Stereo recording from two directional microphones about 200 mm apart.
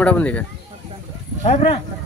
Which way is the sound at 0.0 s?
5° left (ahead or behind).